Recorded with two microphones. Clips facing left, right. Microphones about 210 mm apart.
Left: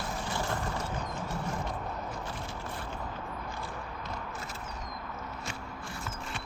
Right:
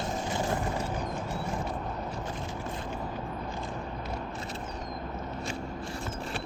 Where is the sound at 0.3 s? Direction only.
20° right (ahead or behind).